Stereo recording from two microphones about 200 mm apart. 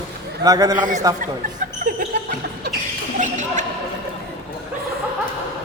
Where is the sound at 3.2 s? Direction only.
40° right (ahead or behind).